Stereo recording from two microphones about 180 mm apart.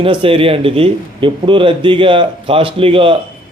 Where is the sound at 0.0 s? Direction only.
30° right (ahead or behind).